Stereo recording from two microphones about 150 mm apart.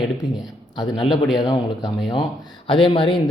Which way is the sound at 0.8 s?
35° left (ahead or behind).